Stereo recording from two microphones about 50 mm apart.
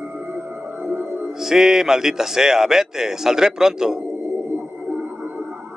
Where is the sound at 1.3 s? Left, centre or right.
Centre.